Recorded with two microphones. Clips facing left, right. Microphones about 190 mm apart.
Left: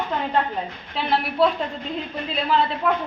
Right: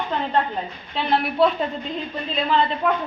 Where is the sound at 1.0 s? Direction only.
Centre (ahead or behind).